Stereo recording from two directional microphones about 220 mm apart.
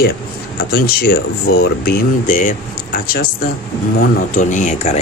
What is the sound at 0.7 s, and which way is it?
Speech, 45° left (ahead or behind).